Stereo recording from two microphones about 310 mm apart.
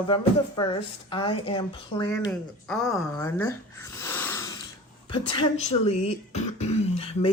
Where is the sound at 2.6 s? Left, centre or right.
Centre.